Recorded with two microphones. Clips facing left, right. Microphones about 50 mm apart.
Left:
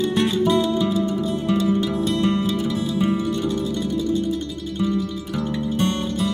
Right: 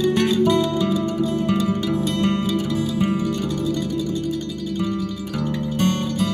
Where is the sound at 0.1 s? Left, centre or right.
Left.